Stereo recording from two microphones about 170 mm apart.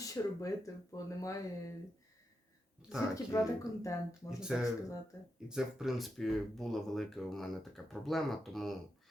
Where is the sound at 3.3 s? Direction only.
15° left (ahead or behind).